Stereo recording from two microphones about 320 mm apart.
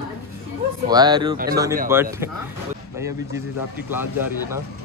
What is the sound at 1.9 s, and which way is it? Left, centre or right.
Speech, centre.